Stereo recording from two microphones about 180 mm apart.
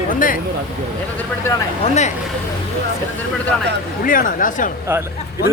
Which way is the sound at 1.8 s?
40° left (ahead or behind).